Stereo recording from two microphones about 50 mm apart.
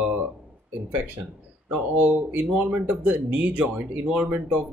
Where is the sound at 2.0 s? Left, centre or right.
Right.